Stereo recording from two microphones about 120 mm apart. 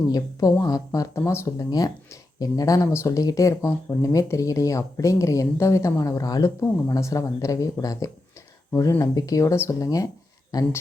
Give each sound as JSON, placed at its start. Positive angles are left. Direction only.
{"t": 0.1, "sound": "speech", "side_deg": 30}